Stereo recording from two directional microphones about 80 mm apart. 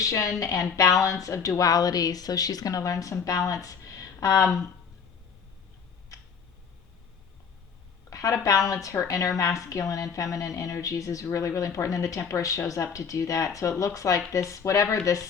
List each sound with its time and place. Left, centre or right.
0.0 s a woman's voice: left
8.1 s a woman's voice: left